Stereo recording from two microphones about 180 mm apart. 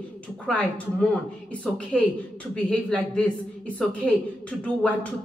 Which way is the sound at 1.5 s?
5° left (ahead or behind).